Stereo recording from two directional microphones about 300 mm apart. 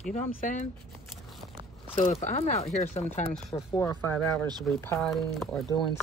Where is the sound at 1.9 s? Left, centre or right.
Left.